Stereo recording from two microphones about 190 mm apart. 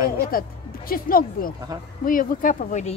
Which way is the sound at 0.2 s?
50° left (ahead or behind).